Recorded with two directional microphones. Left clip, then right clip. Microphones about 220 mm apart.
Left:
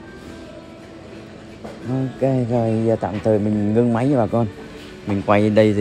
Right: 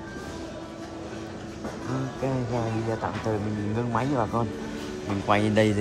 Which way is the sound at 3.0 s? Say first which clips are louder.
Left 9 dB; 45° left (ahead or behind).